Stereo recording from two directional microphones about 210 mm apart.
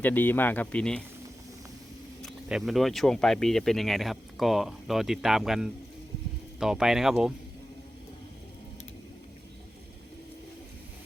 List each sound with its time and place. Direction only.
0.0 s speech: 10° left (ahead or behind)
2.2 s speech: centre (ahead or behind)